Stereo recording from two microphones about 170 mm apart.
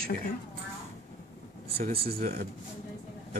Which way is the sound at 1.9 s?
65° right (ahead or behind).